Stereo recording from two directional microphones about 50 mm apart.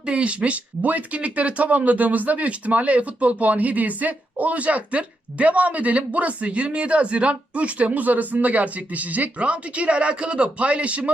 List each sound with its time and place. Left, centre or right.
0.0 s speech: right